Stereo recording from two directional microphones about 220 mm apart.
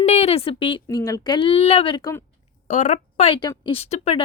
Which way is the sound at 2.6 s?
35° left (ahead or behind).